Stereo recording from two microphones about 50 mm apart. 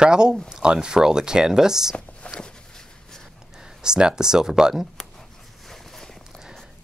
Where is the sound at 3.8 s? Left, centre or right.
Centre.